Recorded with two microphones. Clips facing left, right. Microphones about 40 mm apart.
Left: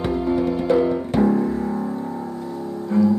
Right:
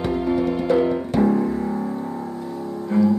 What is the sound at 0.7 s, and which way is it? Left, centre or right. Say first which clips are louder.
Music: even; centre.